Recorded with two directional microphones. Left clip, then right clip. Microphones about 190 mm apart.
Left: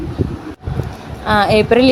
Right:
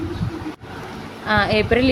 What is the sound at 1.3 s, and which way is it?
Speech, 25° left (ahead or behind).